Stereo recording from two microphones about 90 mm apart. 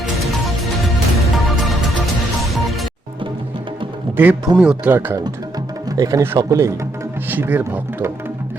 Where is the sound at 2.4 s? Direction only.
Centre (ahead or behind).